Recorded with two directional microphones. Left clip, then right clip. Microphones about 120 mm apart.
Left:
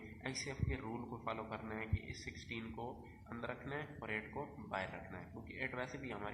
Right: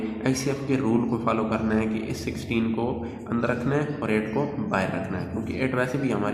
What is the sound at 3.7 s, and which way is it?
A man's voice, 5° left (ahead or behind).